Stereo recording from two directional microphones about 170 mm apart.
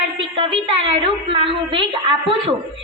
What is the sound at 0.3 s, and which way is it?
A woman's voice, 30° right (ahead or behind).